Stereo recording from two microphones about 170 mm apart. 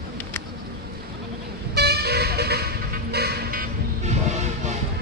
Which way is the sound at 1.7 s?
70° right (ahead or behind).